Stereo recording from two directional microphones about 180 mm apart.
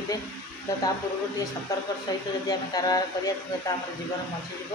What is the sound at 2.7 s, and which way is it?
Speech, 20° left (ahead or behind).